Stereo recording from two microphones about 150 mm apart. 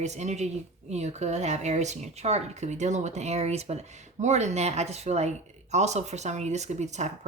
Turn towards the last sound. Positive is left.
turn(degrees=-50)  # may be behind; listen again after turning